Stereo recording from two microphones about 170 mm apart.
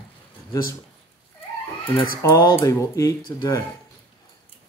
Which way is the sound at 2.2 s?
15° left (ahead or behind).